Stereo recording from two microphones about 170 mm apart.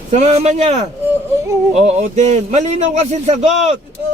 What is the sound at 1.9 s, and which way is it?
A man's voice, 40° right (ahead or behind).